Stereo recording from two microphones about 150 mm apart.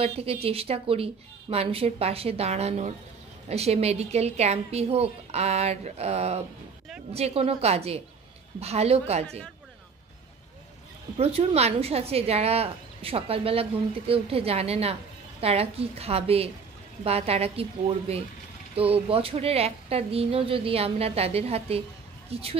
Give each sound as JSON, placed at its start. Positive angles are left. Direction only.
{"t": 0.0, "sound": "speech", "side_deg": -40}
{"t": 11.1, "sound": "speech", "side_deg": -45}